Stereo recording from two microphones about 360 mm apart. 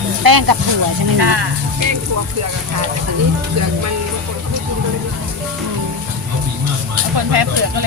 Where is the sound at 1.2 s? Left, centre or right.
Right.